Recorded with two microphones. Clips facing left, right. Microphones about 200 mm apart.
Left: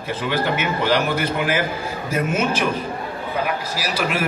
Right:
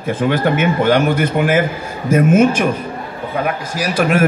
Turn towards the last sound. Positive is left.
turn(degrees=-50)  # may be behind; listen again after turning